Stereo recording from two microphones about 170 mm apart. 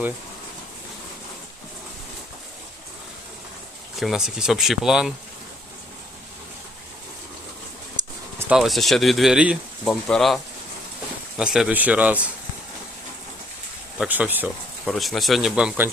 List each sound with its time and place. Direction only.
4.0 s speech: 5° right (ahead or behind)
8.0 s a sound: 25° right (ahead or behind)
8.4 s speech: centre (ahead or behind)
14.0 s speech: 10° right (ahead or behind)